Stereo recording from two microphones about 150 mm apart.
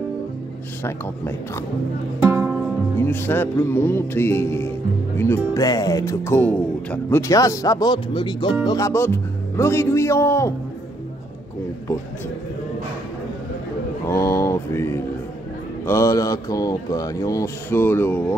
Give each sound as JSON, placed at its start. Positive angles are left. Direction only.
{"t": 0.8, "sound": "music", "side_deg": 15}
{"t": 2.2, "sound": "music", "side_deg": -10}
{"t": 3.0, "sound": "music", "side_deg": 15}
{"t": 8.6, "sound": "music", "side_deg": 20}
{"t": 14.0, "sound": "speech", "side_deg": 20}